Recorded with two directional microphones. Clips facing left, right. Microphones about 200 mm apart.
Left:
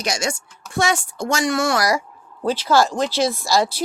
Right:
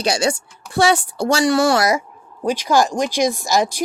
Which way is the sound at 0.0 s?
30° right (ahead or behind).